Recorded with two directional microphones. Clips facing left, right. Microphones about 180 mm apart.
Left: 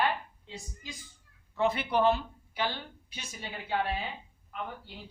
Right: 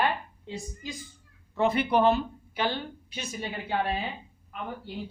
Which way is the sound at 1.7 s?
55° right (ahead or behind).